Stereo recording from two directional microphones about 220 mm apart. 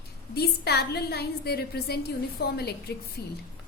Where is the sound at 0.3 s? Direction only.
45° left (ahead or behind).